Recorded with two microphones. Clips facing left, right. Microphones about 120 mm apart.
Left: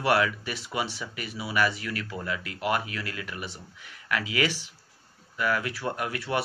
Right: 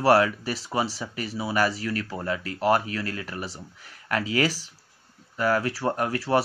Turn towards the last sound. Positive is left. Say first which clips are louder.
# right 6 dB
turn(degrees=-35)  # may be behind; listen again after turning